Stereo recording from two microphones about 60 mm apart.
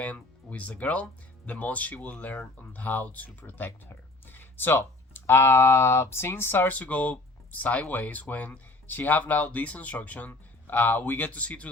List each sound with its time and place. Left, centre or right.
0.0 s speech: left